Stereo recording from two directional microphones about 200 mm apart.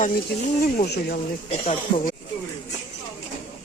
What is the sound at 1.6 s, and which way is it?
Speech, 30° left (ahead or behind).